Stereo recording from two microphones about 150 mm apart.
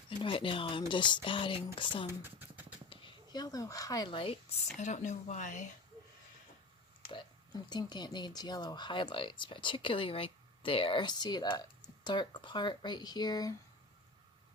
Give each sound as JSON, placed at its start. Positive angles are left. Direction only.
{"t": 0.2, "sound": "speech", "side_deg": 35}
{"t": 2.0, "sound": "a sound", "side_deg": -15}
{"t": 2.9, "sound": "speech", "side_deg": 25}
{"t": 4.8, "sound": "speech", "side_deg": 55}
{"t": 7.1, "sound": "speech", "side_deg": 30}